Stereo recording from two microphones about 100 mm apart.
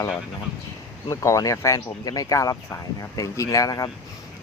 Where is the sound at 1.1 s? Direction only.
30° left (ahead or behind).